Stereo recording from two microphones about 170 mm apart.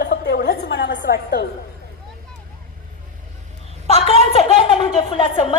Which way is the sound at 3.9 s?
35° left (ahead or behind).